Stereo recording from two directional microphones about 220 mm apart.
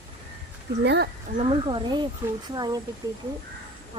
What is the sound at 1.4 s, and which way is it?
Speech, 25° right (ahead or behind).